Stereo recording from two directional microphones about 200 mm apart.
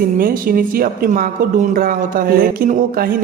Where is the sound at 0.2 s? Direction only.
45° right (ahead or behind).